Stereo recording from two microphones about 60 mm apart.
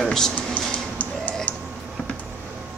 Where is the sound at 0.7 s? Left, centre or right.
Left.